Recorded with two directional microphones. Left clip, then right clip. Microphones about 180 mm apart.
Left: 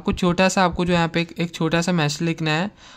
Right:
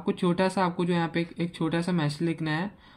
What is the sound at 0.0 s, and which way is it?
Speech, 45° left (ahead or behind).